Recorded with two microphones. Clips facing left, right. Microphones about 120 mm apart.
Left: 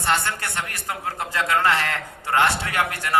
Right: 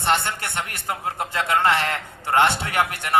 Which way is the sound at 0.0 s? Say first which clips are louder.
Right 1 dB; 25° right (ahead or behind).